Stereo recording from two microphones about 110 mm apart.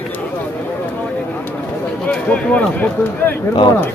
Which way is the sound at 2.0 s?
10° left (ahead or behind).